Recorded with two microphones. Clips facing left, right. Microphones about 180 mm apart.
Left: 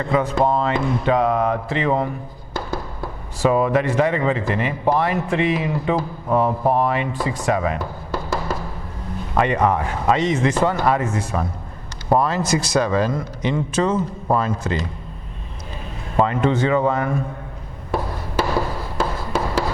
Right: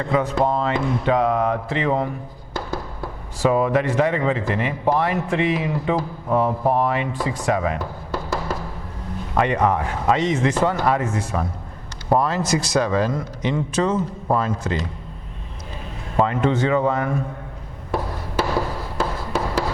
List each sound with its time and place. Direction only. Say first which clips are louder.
0.0 s speech: left 1 dB; 20° left (ahead or behind)
16.1 s a man's voice: left 1 dB; 20° left (ahead or behind)
17.9 s a sound: left 1 dB; 25° left (ahead or behind)